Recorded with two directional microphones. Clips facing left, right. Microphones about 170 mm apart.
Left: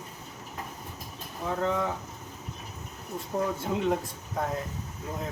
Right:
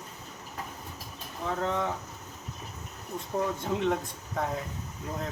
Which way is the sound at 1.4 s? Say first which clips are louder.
Left 1 dB; 5° left (ahead or behind).